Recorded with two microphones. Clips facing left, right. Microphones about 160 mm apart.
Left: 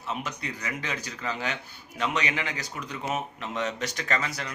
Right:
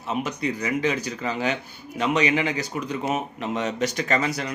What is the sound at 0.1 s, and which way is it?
Speech, 15° right (ahead or behind).